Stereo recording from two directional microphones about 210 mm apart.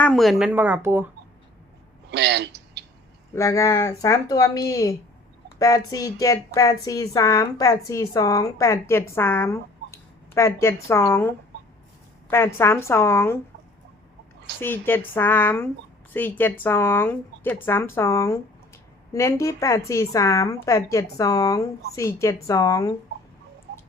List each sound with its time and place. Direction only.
0.0 s speech: centre (ahead or behind)
2.0 s a sound: 55° right (ahead or behind)
3.3 s speech: 15° left (ahead or behind)
14.6 s speech: 10° left (ahead or behind)
23.7 s tick-tock: 55° right (ahead or behind)